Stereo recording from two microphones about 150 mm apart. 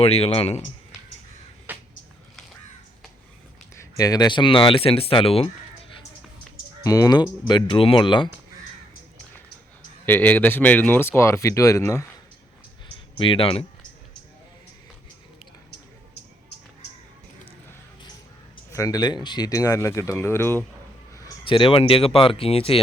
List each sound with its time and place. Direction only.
0.0 s speech: 40° left (ahead or behind)
1.7 s a sound: 10° right (ahead or behind)
3.8 s speech: 25° left (ahead or behind); by 5.5 s 40° left (ahead or behind)
6.8 s speech: 25° left (ahead or behind)
10.1 s speech: 15° left (ahead or behind)
13.1 s speech: 35° left (ahead or behind)
18.7 s speech: 20° left (ahead or behind)
21.4 s speech: 35° left (ahead or behind)